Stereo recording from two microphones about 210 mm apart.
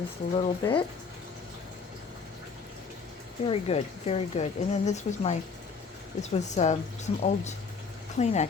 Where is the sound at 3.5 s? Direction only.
30° left (ahead or behind).